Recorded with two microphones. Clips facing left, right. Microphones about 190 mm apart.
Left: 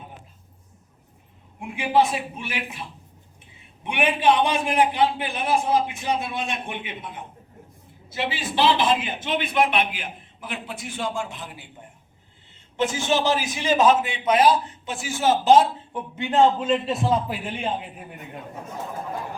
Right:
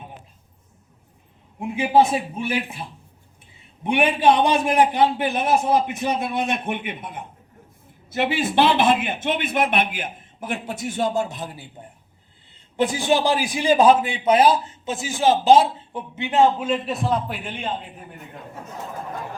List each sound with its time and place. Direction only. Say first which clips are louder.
1.5 s a man's voice: right 3 dB; 25° right (ahead or behind)
3.8 s a man's voice: right 3 dB; 35° right (ahead or behind)
12.7 s a man's voice: right 3 dB; 35° right (ahead or behind); by 15.6 s 10° right (ahead or behind)
15.9 s a man's voice: even; 25° right (ahead or behind); by 17.8 s 5° left (ahead or behind)